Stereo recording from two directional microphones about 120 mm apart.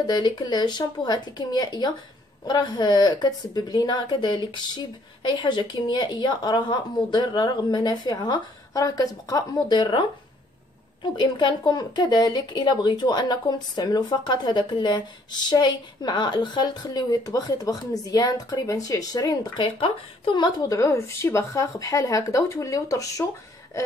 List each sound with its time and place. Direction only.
0.0 s speech: 35° left (ahead or behind)